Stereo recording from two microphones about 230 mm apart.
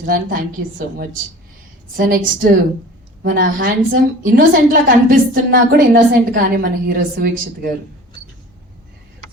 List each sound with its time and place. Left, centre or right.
0.0 s a woman's voice: right